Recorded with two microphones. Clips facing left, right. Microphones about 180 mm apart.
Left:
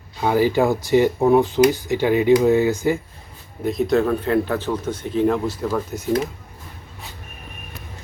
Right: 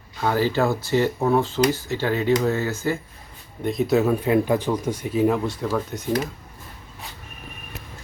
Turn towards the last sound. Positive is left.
turn(degrees=0)  # may be behind; listen again after turning